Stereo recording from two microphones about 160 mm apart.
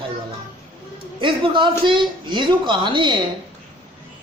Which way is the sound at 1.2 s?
30° right (ahead or behind).